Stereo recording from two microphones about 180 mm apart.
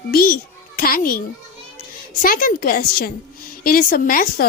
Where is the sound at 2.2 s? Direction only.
50° left (ahead or behind).